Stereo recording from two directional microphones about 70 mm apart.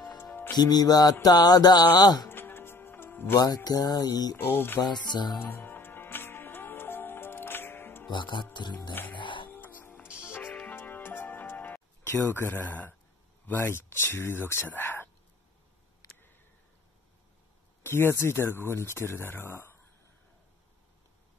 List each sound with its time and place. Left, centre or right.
0.6 s music: left
2.2 s music: left
3.3 s music: left
4.4 s speech: left
4.7 s music: left
5.4 s music: left
8.5 s music: left
9.5 s music: left
10.0 s music: centre
10.5 s music: left
12.1 s speech: left
16.0 s a sound: left
17.8 s speech: left